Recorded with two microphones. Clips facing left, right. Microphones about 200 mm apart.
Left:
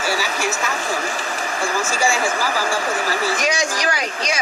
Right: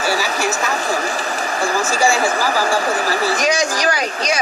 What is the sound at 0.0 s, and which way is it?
Speech, 40° right (ahead or behind).